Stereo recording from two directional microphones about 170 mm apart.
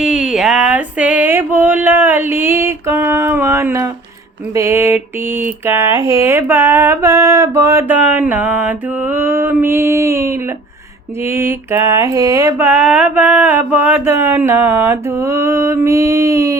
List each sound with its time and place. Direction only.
0.0 s mantra: 5° right (ahead or behind)
5.9 s speech: 30° left (ahead or behind)
6.1 s mantra: 15° right (ahead or behind)